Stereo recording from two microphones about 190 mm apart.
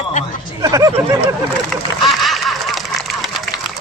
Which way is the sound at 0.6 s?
20° right (ahead or behind).